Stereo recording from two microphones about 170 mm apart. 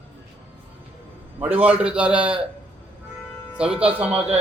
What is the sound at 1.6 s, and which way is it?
Speech, 5° right (ahead or behind).